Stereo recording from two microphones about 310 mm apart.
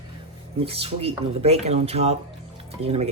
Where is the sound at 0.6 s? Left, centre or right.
Centre.